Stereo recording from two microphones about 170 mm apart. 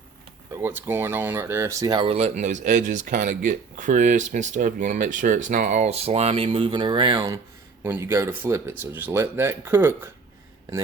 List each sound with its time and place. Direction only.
0.5 s speech: 10° right (ahead or behind)
7.9 s speech: 15° right (ahead or behind)